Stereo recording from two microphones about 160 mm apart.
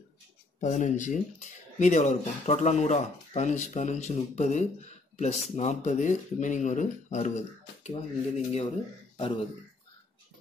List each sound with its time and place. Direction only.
0.6 s speech: 50° left (ahead or behind)